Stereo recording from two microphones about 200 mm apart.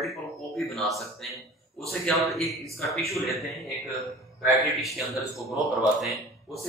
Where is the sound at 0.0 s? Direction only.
Centre (ahead or behind).